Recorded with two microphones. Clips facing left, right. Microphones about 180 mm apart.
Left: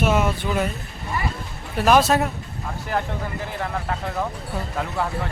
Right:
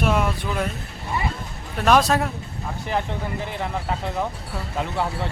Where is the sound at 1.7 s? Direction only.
5° left (ahead or behind).